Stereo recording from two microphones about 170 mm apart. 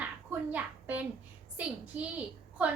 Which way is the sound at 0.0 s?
10° right (ahead or behind).